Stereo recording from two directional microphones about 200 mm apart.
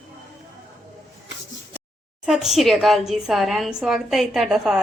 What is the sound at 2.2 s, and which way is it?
A woman's voice, centre (ahead or behind).